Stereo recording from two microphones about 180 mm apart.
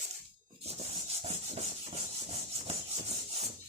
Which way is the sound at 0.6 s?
35° right (ahead or behind).